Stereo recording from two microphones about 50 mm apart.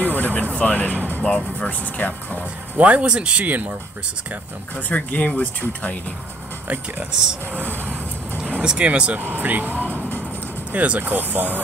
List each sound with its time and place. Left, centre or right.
0.1 s vehicle: left
0.4 s music: left
1.3 s speech: left
2.8 s speech: right
3.4 s speech: right
4.7 s speech: left
7.5 s speech: right
8.6 s speech: right
9.2 s speech: right